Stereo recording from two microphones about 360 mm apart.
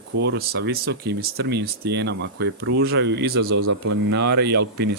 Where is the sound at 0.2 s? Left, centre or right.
Right.